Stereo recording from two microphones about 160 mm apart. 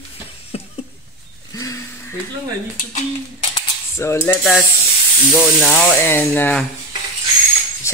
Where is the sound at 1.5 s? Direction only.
20° left (ahead or behind).